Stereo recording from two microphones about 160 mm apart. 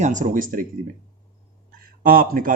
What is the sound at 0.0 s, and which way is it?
Speech, 50° right (ahead or behind).